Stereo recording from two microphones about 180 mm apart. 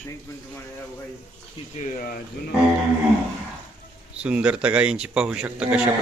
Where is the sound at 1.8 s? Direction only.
50° left (ahead or behind).